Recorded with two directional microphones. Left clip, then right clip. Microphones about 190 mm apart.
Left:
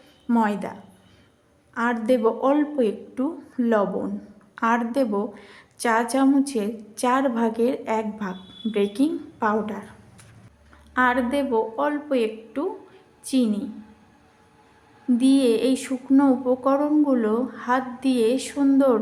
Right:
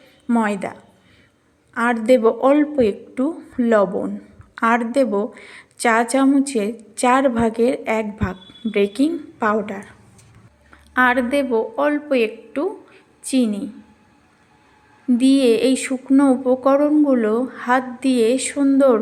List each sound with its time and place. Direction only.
0.3 s a woman's voice: 15° right (ahead or behind)
10.9 s a woman's voice: 20° right (ahead or behind)
15.2 s a woman's voice: 20° right (ahead or behind)